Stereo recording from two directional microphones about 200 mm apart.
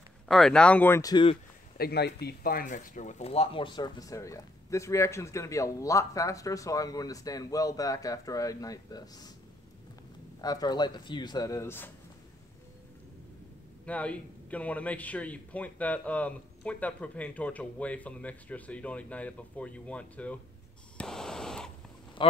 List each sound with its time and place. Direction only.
0.3 s speech: centre (ahead or behind); by 1.4 s 25° left (ahead or behind)
1.8 s speech: 55° left (ahead or behind); by 9.3 s 20° left (ahead or behind)
10.4 s speech: 20° left (ahead or behind)
13.8 s speech: 5° left (ahead or behind)
21.0 s a sound: 5° left (ahead or behind)
22.2 s a sound: 25° left (ahead or behind)